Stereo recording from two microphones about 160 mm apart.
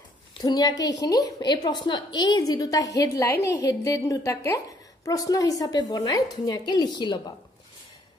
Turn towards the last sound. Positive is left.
turn(degrees=30)  # may be behind; listen again after turning